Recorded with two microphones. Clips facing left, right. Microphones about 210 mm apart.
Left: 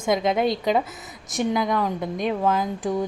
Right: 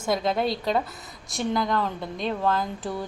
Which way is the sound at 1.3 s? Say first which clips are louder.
Left 3 dB; 15° left (ahead or behind).